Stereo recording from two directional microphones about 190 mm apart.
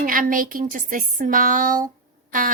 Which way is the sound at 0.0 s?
45° right (ahead or behind).